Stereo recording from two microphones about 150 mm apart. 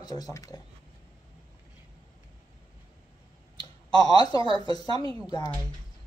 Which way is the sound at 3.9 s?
25° left (ahead or behind).